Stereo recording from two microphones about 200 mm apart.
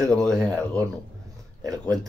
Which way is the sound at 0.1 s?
5° left (ahead or behind).